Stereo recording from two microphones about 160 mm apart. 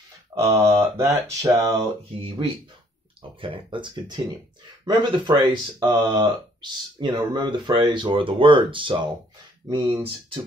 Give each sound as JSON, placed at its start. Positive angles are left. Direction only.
{"t": 0.3, "sound": "speech", "side_deg": -15}
{"t": 3.2, "sound": "speech", "side_deg": -30}